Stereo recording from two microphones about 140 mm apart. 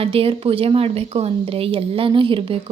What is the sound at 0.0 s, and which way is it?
Speech, 45° right (ahead or behind).